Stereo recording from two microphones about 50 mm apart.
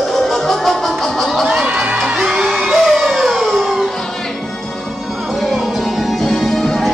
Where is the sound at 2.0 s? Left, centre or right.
Centre.